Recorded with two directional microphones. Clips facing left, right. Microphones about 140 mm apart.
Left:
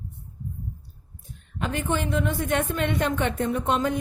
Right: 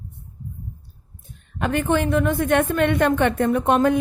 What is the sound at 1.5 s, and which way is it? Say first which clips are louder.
Speech: right 6 dB; 60° right (ahead or behind).